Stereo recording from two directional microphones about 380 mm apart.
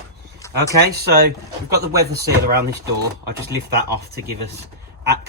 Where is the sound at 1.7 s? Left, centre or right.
Right.